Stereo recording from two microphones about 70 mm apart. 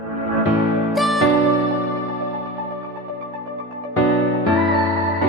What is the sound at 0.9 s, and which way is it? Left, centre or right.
Music, centre.